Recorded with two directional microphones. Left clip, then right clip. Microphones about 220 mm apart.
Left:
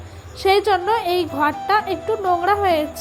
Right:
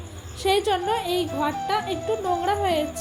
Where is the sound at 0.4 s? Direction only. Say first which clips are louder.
Left 6 dB; 15° left (ahead or behind).